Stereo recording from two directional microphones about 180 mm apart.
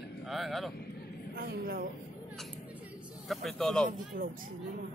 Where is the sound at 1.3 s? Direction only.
55° right (ahead or behind).